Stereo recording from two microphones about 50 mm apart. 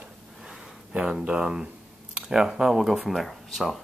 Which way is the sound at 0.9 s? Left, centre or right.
Right.